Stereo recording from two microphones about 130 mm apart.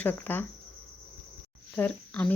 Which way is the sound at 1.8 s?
10° left (ahead or behind).